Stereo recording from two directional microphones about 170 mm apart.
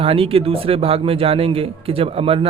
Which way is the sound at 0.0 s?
35° right (ahead or behind).